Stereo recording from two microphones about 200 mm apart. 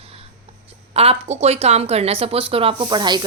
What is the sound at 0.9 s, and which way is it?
Speech, 30° right (ahead or behind).